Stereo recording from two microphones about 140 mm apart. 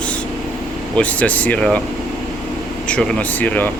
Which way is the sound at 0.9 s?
10° left (ahead or behind).